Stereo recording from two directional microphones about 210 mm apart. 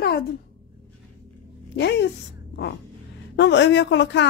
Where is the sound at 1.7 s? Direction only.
55° left (ahead or behind).